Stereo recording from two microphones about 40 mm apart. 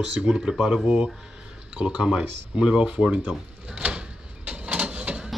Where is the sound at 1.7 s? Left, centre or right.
Right.